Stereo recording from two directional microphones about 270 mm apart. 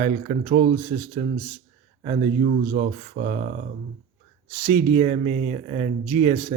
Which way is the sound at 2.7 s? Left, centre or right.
Right.